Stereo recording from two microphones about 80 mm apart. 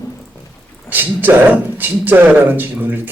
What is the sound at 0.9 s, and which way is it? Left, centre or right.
A man's voice, right.